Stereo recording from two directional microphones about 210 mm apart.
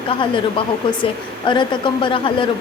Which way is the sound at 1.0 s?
20° left (ahead or behind).